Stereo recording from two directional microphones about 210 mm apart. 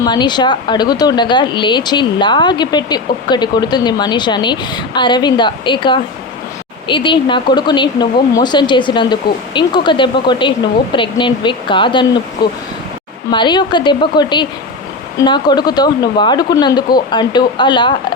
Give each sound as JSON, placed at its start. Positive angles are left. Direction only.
{"t": 0.0, "sound": "speech", "side_deg": 20}